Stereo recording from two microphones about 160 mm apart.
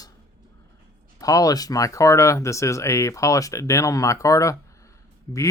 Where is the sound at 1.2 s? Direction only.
20° left (ahead or behind).